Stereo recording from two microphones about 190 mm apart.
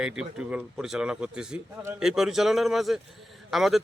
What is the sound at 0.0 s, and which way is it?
A man's voice, 5° right (ahead or behind).